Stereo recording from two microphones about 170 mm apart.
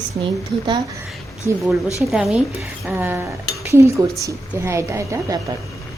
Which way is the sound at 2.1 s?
Centre (ahead or behind).